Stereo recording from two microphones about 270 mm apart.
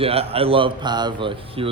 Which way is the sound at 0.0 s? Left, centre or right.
Right.